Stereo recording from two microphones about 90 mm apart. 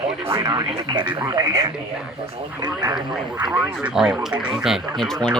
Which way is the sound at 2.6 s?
50° right (ahead or behind).